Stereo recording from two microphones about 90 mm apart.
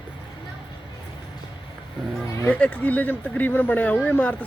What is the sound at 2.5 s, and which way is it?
Speech, 15° left (ahead or behind).